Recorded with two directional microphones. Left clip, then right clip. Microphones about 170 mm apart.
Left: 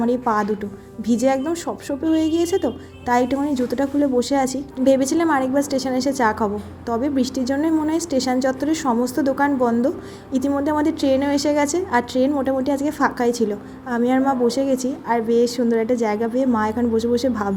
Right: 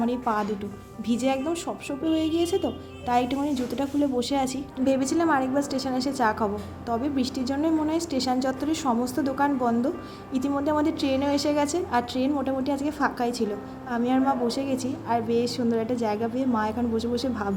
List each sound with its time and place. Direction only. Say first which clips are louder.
0.0 s a woman's voice: left 6 dB; 35° left (ahead or behind)